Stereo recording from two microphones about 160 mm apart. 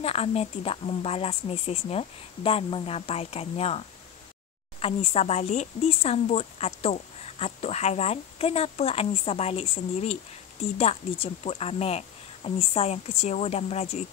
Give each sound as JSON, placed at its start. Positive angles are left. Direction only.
{"t": 0.0, "sound": "speech", "side_deg": 40}